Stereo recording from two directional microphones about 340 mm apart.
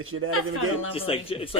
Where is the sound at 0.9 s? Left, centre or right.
Centre.